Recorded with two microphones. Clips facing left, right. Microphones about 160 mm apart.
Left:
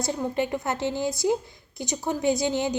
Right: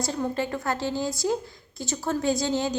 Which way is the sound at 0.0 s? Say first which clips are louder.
Left 1 dB; 20° left (ahead or behind).